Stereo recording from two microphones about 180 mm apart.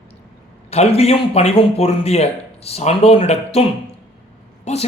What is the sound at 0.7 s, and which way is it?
Speech, 35° left (ahead or behind).